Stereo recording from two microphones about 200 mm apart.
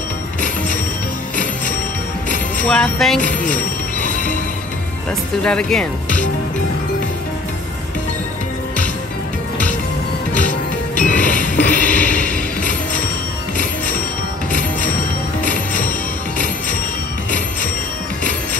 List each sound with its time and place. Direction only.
1.3 s music: 40° left (ahead or behind)
2.6 s speech: 5° left (ahead or behind)
3.2 s music: 40° left (ahead or behind)
5.4 s speech: 5° left (ahead or behind)
11.0 s music: 40° left (ahead or behind)
15.4 s music: 40° left (ahead or behind)